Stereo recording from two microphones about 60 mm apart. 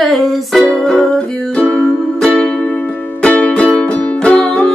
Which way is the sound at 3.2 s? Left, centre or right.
Left.